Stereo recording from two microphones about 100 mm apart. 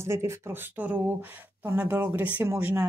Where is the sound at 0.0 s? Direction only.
25° right (ahead or behind).